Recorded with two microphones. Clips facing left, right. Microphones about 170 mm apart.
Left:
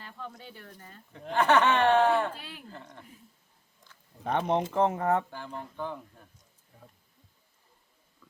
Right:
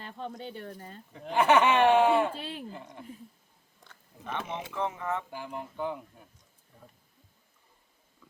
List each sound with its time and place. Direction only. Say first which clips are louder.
0.0 s speech: right 5 dB; 25° right (ahead or behind)
1.1 s speech: right 1 dB; 5° right (ahead or behind)
2.3 s speech: right 6 dB; 25° right (ahead or behind)
2.6 s speech: right 3 dB; 15° right (ahead or behind)
4.2 s speech: left 9 dB; 55° left (ahead or behind)
5.3 s speech: right 1 dB; 15° right (ahead or behind)